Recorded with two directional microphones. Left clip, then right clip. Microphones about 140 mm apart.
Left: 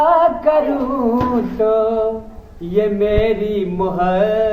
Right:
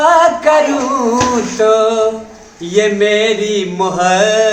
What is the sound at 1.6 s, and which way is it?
Mantra, 15° right (ahead or behind).